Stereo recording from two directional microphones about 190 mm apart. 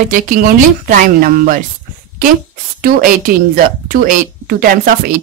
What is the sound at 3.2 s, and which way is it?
Speech, 45° right (ahead or behind).